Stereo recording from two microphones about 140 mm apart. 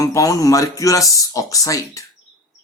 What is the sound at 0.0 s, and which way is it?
Speech, 25° left (ahead or behind).